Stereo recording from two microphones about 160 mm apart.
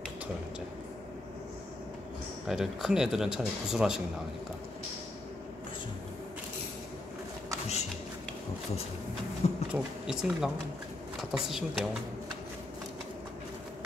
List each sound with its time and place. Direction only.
2.4 s speech: centre (ahead or behind)
9.4 s speech: 40° left (ahead or behind)
10.0 s speech: 5° right (ahead or behind)